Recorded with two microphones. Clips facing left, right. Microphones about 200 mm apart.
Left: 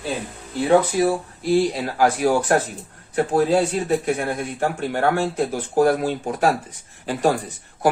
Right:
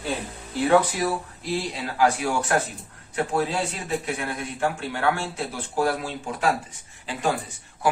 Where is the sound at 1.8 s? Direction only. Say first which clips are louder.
Left 3 dB; 45° left (ahead or behind).